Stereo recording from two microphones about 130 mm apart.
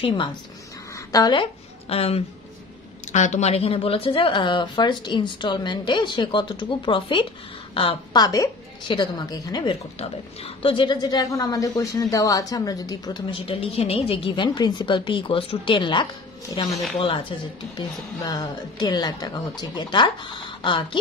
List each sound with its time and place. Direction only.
0.0 s a woman's voice: 40° left (ahead or behind)
3.1 s speech: 65° left (ahead or behind); by 9.8 s 30° left (ahead or behind)
9.9 s a woman's voice: 45° left (ahead or behind); by 13.2 s 30° left (ahead or behind)
13.3 s speech: 45° left (ahead or behind)